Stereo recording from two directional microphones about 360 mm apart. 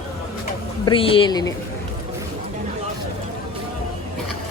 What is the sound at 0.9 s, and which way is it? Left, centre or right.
Speech, centre.